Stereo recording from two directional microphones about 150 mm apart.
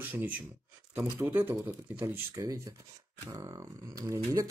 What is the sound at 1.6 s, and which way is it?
Speech, 15° right (ahead or behind).